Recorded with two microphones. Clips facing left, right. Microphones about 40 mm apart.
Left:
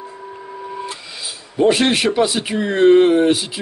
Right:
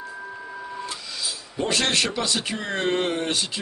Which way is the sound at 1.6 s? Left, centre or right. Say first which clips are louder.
Left 9 dB; centre.